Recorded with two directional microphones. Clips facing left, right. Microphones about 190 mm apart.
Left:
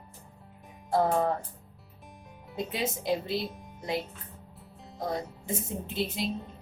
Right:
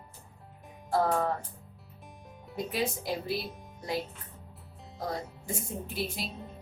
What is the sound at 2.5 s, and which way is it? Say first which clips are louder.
Speech: even; 20° left (ahead or behind).